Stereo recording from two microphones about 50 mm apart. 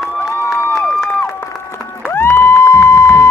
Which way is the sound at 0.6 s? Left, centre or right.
Left.